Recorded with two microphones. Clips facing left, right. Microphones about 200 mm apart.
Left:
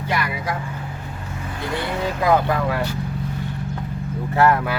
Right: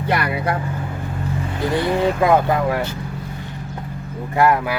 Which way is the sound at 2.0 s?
25° right (ahead or behind).